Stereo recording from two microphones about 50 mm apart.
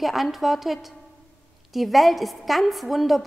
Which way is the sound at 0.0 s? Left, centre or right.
Centre.